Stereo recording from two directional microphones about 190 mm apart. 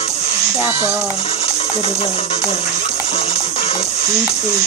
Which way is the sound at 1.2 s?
30° left (ahead or behind).